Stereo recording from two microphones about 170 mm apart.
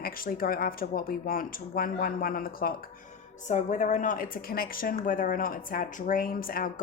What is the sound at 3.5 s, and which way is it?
A woman's voice, 45° left (ahead or behind).